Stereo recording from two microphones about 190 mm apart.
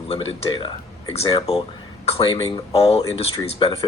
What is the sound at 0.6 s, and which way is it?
Speech, 30° left (ahead or behind).